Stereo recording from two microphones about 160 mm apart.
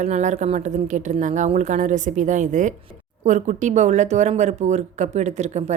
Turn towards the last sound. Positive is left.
turn(degrees=-45)  # may be behind; listen again after turning